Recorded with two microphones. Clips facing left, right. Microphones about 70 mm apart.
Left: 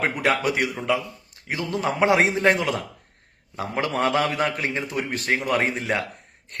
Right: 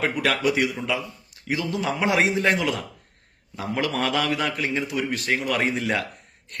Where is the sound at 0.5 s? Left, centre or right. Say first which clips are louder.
Left 1 dB; left.